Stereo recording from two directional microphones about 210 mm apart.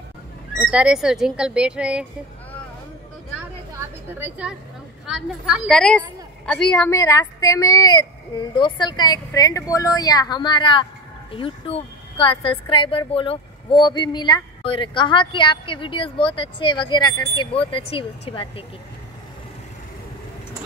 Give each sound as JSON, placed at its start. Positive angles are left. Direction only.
{"t": 0.6, "sound": "a woman's voice", "side_deg": -5}
{"t": 4.1, "sound": "a woman's voice", "side_deg": -5}
{"t": 7.0, "sound": "a woman's voice", "side_deg": 15}